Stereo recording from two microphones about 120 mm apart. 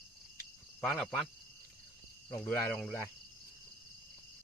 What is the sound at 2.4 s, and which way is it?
Speech, 15° left (ahead or behind).